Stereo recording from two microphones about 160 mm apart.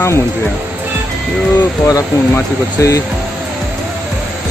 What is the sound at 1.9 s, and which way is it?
Speech, 20° left (ahead or behind).